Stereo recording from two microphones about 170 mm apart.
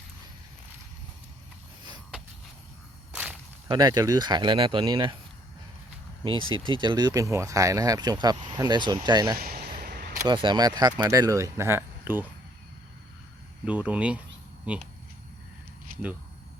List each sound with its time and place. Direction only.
3.1 s whip: 5° right (ahead or behind)
3.7 s speech: 25° right (ahead or behind)
6.2 s speech: 30° right (ahead or behind)
9.4 s a sound: 60° right (ahead or behind)
10.2 s speech: 25° right (ahead or behind); by 12.3 s 10° right (ahead or behind)
13.7 s speech: 10° right (ahead or behind)
15.9 s a sound: 55° right (ahead or behind)